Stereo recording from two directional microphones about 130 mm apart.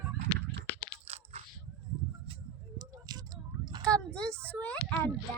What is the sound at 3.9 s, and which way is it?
Speech, 5° left (ahead or behind).